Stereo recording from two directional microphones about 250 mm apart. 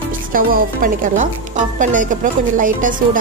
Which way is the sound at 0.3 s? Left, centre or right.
Right.